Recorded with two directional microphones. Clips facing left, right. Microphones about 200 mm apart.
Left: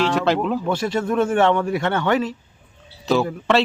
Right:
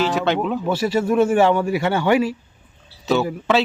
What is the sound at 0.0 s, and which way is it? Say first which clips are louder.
A man's voice: even; centre (ahead or behind).